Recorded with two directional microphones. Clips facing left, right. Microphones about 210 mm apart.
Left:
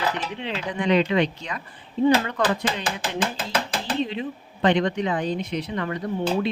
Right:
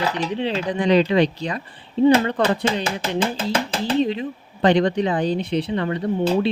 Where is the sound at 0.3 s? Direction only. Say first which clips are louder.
Right 6 dB; 35° right (ahead or behind).